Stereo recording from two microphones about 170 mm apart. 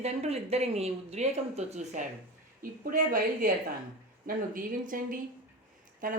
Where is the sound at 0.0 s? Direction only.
35° right (ahead or behind).